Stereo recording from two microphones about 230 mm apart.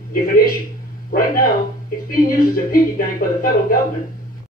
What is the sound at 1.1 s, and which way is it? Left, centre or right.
Speech, left.